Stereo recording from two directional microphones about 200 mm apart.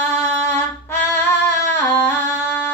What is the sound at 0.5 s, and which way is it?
Singing, 10° left (ahead or behind).